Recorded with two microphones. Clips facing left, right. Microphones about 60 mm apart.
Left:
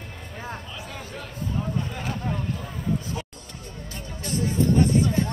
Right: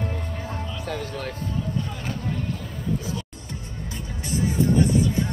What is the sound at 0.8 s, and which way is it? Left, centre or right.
Music, right.